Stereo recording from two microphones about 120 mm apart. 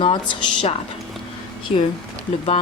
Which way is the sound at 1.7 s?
65° left (ahead or behind).